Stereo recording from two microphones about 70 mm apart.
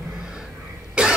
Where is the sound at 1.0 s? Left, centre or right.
Centre.